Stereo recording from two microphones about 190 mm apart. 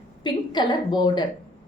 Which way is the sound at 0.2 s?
25° left (ahead or behind).